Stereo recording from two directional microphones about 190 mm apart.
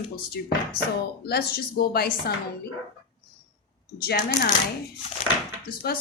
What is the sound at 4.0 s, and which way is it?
Speech, 55° left (ahead or behind).